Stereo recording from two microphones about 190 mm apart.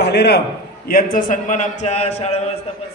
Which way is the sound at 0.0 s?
60° left (ahead or behind).